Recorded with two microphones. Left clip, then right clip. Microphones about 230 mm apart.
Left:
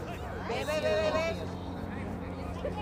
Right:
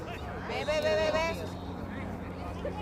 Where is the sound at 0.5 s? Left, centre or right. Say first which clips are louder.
Right 2 dB; right.